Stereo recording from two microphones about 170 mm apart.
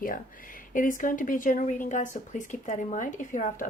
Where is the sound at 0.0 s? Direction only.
55° left (ahead or behind).